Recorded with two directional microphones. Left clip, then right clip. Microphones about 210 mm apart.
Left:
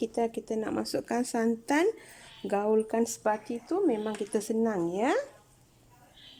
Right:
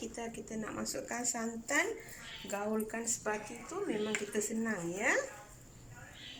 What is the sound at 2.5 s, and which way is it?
Speech, 65° left (ahead or behind).